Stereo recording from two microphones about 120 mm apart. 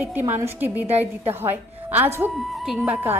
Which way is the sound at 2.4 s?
5° right (ahead or behind).